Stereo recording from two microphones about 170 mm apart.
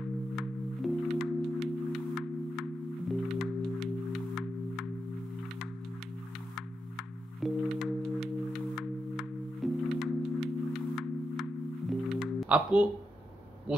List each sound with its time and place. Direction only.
0.4 s music: centre (ahead or behind)
7.0 s music: centre (ahead or behind)
13.7 s speech: 5° right (ahead or behind)